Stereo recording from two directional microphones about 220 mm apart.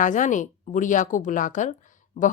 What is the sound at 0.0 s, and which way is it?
A woman's voice, 35° left (ahead or behind).